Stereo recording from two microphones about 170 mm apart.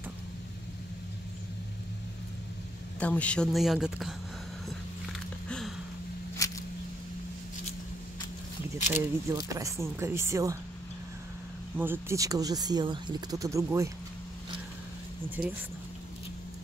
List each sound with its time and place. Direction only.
3.0 s speech: 10° left (ahead or behind)
5.5 s a sound: centre (ahead or behind)
8.9 s speech: 20° right (ahead or behind)
11.7 s speech: 10° right (ahead or behind)
15.4 s speech: 5° right (ahead or behind)